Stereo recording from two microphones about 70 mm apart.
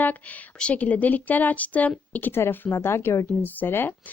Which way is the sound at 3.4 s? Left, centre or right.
Left.